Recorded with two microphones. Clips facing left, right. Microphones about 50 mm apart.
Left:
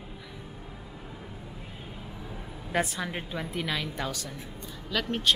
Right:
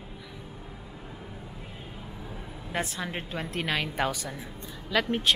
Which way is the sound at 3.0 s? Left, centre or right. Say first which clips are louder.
Even; centre.